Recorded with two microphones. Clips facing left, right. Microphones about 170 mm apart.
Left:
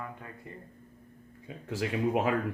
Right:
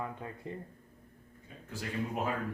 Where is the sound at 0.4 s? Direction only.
20° right (ahead or behind).